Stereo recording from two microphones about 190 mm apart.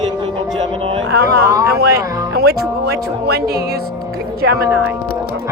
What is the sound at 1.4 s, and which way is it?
Speech, 15° right (ahead or behind).